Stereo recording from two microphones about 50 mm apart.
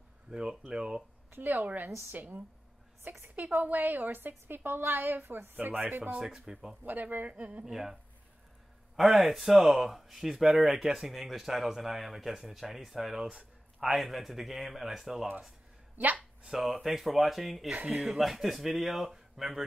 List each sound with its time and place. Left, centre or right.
0.3 s speech: centre
1.3 s a woman's voice: right
3.0 s a woman's voice: right
6.0 s speech: centre
6.8 s a woman's voice: right
7.6 s speech: centre
16.4 s speech: centre